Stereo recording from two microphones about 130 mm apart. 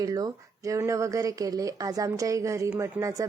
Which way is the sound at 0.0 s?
30° right (ahead or behind).